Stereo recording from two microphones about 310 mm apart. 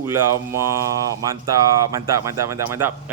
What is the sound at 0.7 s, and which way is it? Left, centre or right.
Speech, centre.